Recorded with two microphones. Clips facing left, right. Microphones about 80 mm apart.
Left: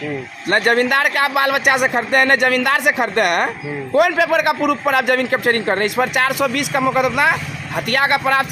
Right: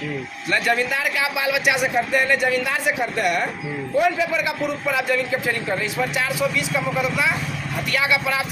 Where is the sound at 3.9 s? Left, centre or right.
Left.